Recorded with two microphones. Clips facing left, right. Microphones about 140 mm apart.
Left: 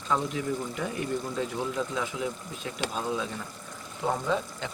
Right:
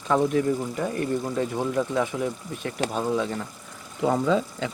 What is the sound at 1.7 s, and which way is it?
Speech, 55° right (ahead or behind).